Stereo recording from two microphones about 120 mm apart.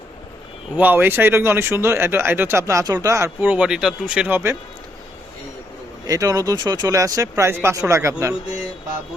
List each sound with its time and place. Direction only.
0.8 s speech: 15° right (ahead or behind)
6.1 s speech: 30° right (ahead or behind)